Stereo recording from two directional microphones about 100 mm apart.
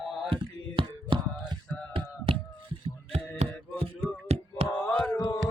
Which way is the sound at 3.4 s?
70° right (ahead or behind).